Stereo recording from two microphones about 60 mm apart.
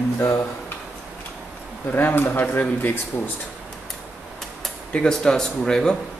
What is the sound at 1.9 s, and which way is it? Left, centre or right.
Speech, left.